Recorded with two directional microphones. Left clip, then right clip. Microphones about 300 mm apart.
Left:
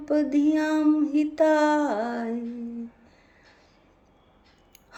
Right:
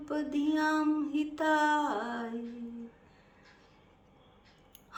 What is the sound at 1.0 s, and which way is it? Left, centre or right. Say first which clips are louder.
A woman's voice: left 10 dB; centre.